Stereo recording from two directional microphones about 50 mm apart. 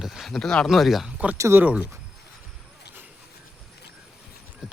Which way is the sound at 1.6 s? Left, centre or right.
Right.